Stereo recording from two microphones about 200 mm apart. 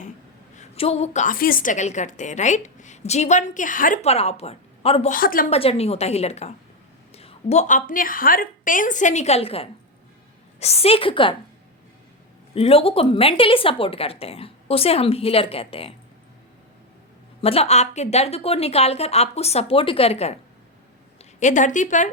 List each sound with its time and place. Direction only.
0.5 s a woman's voice: 35° left (ahead or behind)
5.1 s a woman's voice: 45° left (ahead or behind)
5.5 s a woman's voice: 30° left (ahead or behind)
12.5 s a woman's voice: 30° left (ahead or behind)
17.4 s a woman's voice: 30° left (ahead or behind)